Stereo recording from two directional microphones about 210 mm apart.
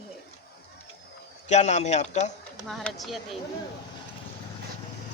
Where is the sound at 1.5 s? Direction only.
35° left (ahead or behind).